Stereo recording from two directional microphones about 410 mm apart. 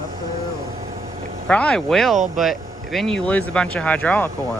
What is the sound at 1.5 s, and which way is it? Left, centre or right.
Speech, centre.